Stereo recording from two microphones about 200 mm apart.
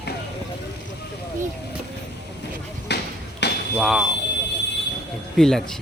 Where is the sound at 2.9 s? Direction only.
60° left (ahead or behind).